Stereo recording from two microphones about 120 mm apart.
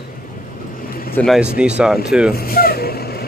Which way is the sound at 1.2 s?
5° right (ahead or behind).